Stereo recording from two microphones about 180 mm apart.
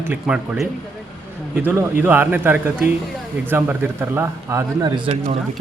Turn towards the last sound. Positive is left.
turn(degrees=-30)  # may be behind; listen again after turning